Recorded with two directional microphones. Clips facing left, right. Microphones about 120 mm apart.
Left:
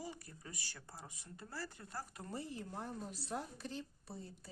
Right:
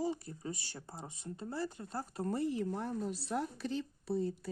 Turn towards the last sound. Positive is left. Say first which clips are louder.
# right 16 dB
turn(degrees=-70)  # may be behind; listen again after turning